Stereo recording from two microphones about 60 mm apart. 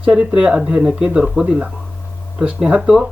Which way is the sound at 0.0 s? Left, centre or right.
Centre.